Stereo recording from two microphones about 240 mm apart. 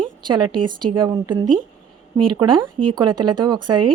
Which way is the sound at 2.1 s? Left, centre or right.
Right.